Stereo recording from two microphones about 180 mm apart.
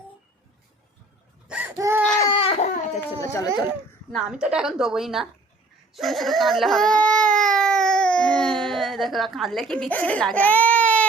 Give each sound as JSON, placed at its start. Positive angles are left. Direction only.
{"t": 1.5, "sound": "a sound", "side_deg": -10}
{"t": 2.0, "sound": "baby cry", "side_deg": 50}
{"t": 2.3, "sound": "a sound", "side_deg": 35}
{"t": 3.2, "sound": "speech", "side_deg": 20}
{"t": 4.1, "sound": "a woman's voice", "side_deg": -5}
{"t": 5.9, "sound": "crying", "side_deg": 0}